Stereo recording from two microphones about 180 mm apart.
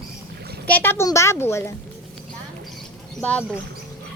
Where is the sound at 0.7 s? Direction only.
10° left (ahead or behind).